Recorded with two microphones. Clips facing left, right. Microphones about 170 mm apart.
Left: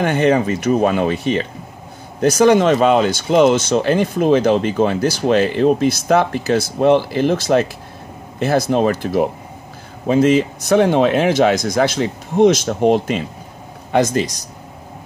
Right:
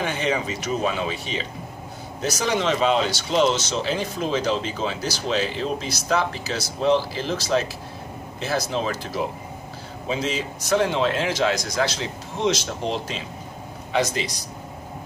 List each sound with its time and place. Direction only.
0.0 s speech: 55° left (ahead or behind)